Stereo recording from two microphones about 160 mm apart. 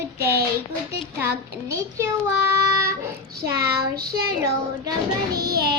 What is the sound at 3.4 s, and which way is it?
Speech, 80° right.